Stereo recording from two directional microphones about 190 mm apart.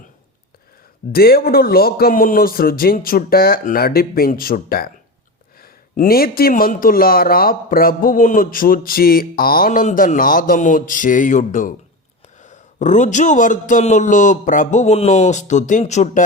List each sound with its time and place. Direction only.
1.1 s a man's voice: 50° left (ahead or behind); by 16.2 s 35° left (ahead or behind)